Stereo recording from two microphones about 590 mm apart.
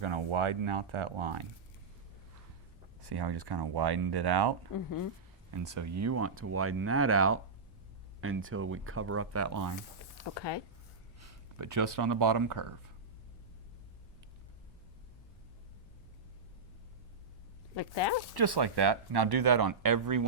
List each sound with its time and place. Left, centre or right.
0.0 s speech: right
3.0 s speech: right
4.7 s speech: left
5.5 s speech: right
10.3 s speech: left
11.2 s speech: right
17.7 s speech: left
18.3 s speech: right